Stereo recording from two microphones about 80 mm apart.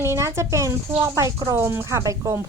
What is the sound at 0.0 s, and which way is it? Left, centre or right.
Speech, right.